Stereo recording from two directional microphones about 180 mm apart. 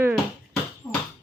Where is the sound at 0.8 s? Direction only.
15° left (ahead or behind).